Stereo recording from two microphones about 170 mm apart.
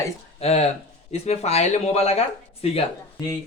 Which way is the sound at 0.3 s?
35° left (ahead or behind).